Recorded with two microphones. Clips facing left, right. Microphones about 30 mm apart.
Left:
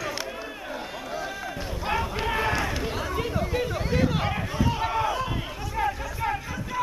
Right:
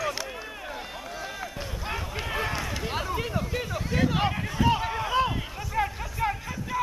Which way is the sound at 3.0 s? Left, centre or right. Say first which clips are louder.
Left 2 dB; centre.